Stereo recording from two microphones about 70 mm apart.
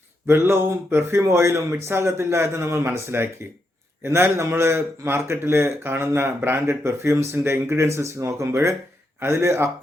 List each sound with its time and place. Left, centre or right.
0.3 s a man's voice: right